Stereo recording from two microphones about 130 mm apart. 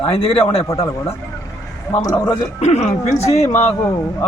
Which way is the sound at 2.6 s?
55° left (ahead or behind).